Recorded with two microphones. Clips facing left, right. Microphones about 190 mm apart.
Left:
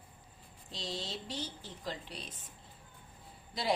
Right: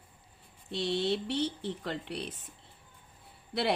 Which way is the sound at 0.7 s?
65° right (ahead or behind).